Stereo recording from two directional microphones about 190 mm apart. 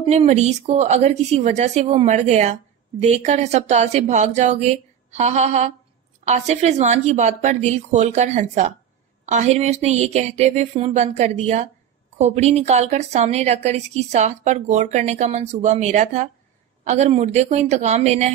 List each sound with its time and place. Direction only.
0.0 s a woman's voice: 35° right (ahead or behind)